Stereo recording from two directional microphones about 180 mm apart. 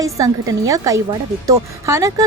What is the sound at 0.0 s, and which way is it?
A woman's voice, 20° right (ahead or behind).